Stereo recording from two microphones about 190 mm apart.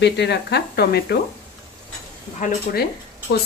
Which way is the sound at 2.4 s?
40° left (ahead or behind).